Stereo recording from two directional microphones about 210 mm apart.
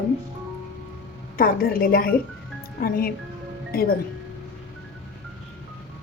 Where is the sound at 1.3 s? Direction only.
45° left (ahead or behind).